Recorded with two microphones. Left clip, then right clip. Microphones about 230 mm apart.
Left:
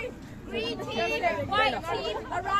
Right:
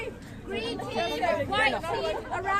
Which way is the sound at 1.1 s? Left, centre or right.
Centre.